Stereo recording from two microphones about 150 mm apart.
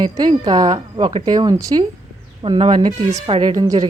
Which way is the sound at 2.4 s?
40° right (ahead or behind).